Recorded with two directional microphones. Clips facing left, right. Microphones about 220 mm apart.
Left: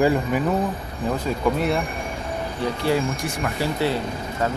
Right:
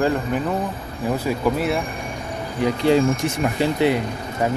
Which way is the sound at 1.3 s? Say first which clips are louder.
Even; 5° right (ahead or behind).